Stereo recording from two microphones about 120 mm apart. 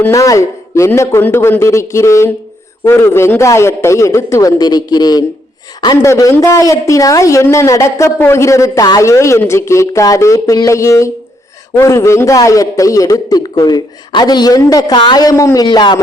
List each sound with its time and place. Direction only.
0.1 s a man's voice: 25° left (ahead or behind)
15.6 s a man's voice: 40° left (ahead or behind)